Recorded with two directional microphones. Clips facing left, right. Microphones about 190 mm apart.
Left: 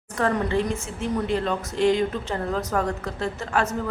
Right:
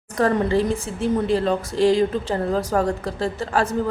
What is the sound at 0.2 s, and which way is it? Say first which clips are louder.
Speech: right 4 dB; 35° right (ahead or behind).